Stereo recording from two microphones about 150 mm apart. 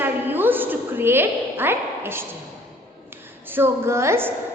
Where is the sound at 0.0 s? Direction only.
15° right (ahead or behind).